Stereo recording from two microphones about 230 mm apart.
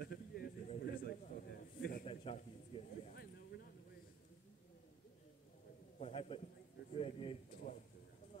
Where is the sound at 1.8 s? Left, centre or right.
Left.